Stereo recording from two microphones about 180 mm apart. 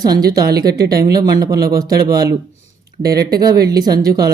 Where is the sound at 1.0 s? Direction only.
20° right (ahead or behind).